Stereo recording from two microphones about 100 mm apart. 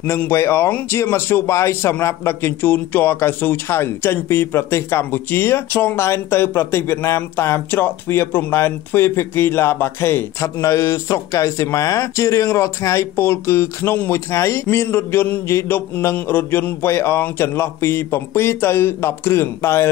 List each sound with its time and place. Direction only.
0.3 s a man's voice: 25° left (ahead or behind)